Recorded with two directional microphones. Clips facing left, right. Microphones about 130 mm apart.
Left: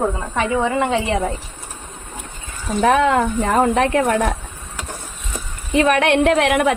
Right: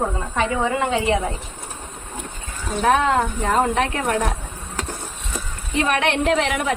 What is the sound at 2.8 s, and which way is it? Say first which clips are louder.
Speech: left 3 dB; 60° left (ahead or behind).